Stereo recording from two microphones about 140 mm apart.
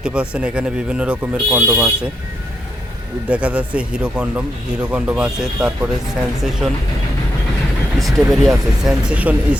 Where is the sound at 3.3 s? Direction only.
10° right (ahead or behind).